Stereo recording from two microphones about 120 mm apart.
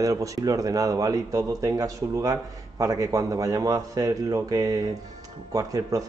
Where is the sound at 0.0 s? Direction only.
30° right (ahead or behind).